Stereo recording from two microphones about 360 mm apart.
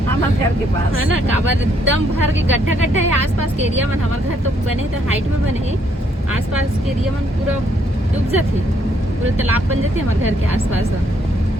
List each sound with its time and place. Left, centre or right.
1.8 s speech: right